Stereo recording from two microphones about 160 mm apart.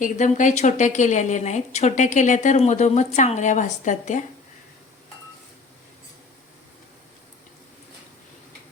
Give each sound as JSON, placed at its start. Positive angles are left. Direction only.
{"t": 0.0, "sound": "a woman's voice", "side_deg": 50}